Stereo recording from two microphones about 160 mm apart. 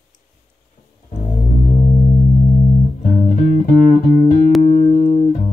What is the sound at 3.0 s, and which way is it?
Music, 50° left (ahead or behind).